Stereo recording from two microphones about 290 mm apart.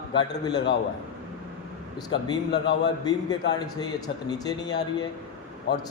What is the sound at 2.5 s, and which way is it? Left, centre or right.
Speech, left.